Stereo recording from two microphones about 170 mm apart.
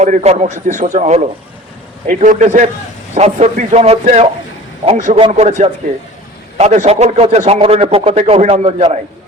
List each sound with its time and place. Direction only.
0.0 s a man's voice: 40° right (ahead or behind)